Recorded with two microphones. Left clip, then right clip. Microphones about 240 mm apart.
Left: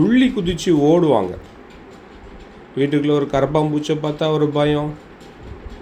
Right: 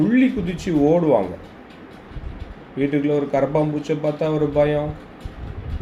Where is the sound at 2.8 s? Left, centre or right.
Left.